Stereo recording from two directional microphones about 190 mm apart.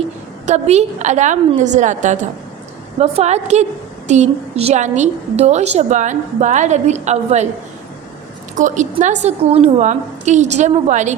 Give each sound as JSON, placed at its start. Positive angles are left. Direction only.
{"t": 0.4, "sound": "a woman's voice", "side_deg": -35}
{"t": 8.5, "sound": "a woman's voice", "side_deg": -40}